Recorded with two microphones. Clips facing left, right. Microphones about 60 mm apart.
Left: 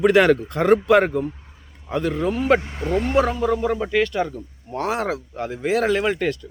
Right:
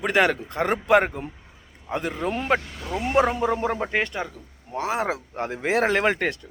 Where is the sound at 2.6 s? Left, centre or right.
Left.